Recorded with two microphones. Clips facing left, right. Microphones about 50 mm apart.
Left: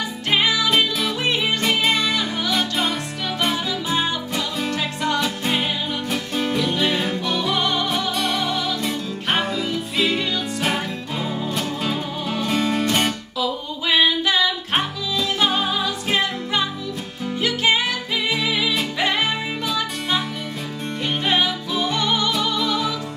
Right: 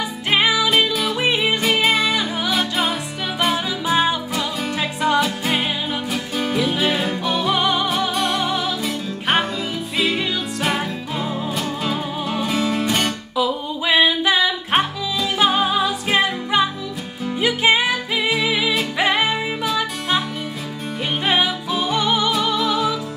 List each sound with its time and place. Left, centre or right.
0.3 s music: centre
0.7 s music: centre
1.2 s music: centre
5.2 s music: centre
13.4 s music: centre
21.3 s music: centre